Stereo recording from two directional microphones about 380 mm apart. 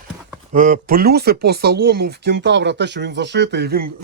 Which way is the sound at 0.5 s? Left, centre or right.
Right.